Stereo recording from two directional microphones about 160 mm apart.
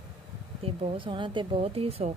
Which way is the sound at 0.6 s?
35° right (ahead or behind).